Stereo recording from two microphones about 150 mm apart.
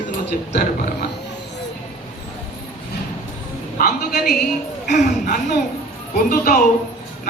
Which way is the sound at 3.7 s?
85° left.